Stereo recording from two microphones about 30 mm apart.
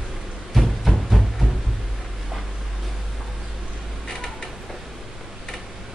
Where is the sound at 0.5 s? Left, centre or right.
Centre.